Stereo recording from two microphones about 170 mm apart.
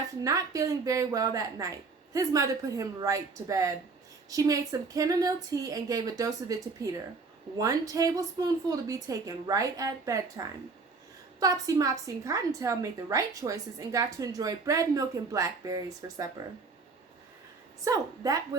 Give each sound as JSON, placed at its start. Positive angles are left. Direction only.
{"t": 0.2, "sound": "a woman's voice", "side_deg": -20}
{"t": 17.8, "sound": "a woman's voice", "side_deg": -20}